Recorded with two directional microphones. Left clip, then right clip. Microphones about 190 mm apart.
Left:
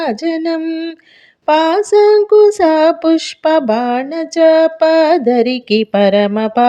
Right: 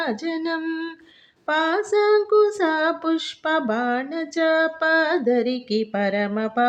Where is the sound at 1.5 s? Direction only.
45° left (ahead or behind).